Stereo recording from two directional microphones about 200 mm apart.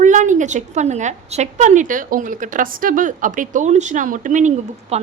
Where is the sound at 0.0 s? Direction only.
40° right (ahead or behind).